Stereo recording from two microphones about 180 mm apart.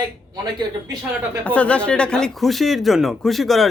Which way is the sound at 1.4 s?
5° left (ahead or behind).